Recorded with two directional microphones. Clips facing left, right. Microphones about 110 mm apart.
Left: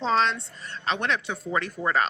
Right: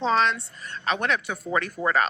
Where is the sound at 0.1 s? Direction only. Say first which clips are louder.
Left 1 dB; 30° left (ahead or behind).